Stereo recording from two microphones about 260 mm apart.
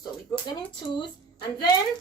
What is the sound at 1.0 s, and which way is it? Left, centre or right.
Speech, centre.